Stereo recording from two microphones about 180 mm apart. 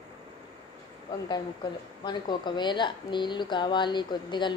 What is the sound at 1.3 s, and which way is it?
A woman's voice, 25° left (ahead or behind).